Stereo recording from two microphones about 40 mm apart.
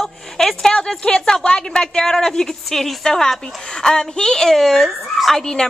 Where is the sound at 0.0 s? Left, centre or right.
Centre.